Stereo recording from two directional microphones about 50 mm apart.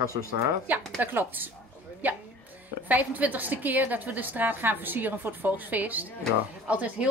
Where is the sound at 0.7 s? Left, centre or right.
Right.